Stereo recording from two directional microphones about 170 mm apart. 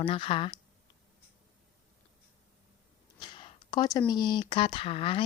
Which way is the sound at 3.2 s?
30° left (ahead or behind).